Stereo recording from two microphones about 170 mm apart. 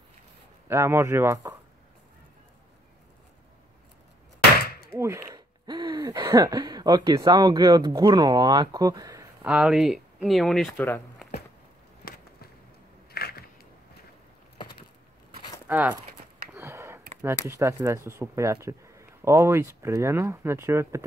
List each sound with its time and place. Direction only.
0.7 s speech: 15° right (ahead or behind)
4.9 s speech: 15° right (ahead or behind)
9.4 s speech: 5° right (ahead or behind)
12.0 s a sound: 60° left (ahead or behind)
15.6 s clip-clop: 10° right (ahead or behind)
16.5 s a sound: 15° right (ahead or behind)
17.5 s speech: 20° right (ahead or behind)